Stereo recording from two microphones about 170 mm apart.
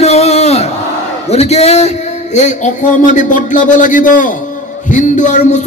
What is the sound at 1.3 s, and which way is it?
A man's voice, 40° left (ahead or behind).